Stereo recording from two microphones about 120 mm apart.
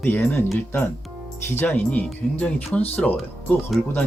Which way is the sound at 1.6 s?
15° left (ahead or behind).